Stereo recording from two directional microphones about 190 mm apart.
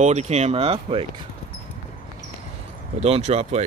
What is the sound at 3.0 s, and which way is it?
Speech, 35° right (ahead or behind).